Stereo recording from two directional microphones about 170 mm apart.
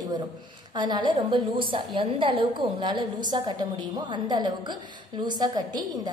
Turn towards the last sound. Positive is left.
turn(degrees=-25)  # may be behind; listen again after turning